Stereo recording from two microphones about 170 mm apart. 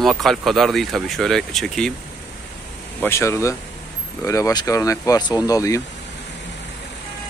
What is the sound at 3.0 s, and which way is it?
Speech, 15° left (ahead or behind).